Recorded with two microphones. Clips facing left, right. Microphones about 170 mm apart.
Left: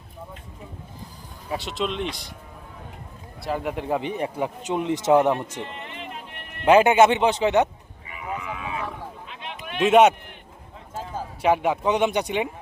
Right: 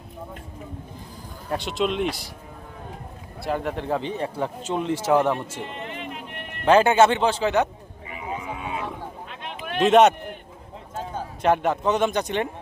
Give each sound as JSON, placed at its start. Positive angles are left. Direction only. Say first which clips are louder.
{"t": 1.5, "sound": "speech", "louder": "right 3 dB", "side_deg": 0}
{"t": 3.4, "sound": "speech", "louder": "right 1 dB", "side_deg": 5}
{"t": 6.7, "sound": "speech", "louder": "left 1 dB", "side_deg": 15}
{"t": 8.4, "sound": "a sound", "louder": "even", "side_deg": -30}
{"t": 9.4, "sound": "a sound", "louder": "right 4 dB", "side_deg": -50}
{"t": 9.8, "sound": "speech", "louder": "even", "side_deg": 10}